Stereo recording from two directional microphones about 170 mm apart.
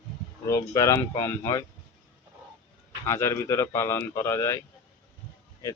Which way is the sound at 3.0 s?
15° left (ahead or behind).